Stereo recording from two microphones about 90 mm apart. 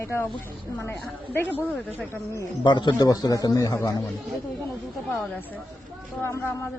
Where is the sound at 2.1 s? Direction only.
30° left (ahead or behind).